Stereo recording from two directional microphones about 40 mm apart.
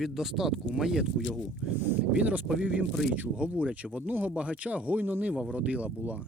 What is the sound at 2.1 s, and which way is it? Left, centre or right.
Speech, right.